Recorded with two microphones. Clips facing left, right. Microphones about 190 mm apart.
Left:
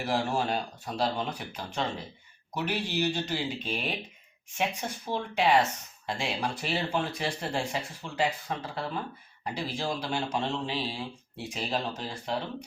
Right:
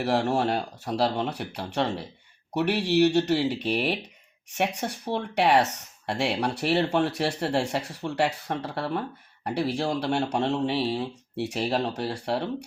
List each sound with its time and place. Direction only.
0.0 s speech: 65° right (ahead or behind)